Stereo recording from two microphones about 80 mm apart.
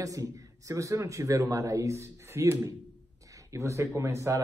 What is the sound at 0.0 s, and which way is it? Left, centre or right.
Speech, right.